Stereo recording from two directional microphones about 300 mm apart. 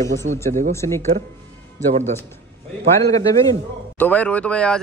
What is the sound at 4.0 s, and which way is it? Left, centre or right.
Speech, centre.